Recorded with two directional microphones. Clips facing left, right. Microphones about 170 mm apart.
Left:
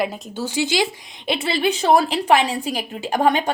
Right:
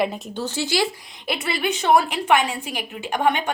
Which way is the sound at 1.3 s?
30° left (ahead or behind).